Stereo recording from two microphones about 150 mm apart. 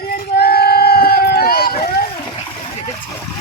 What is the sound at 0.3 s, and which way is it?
Boat, 90° left.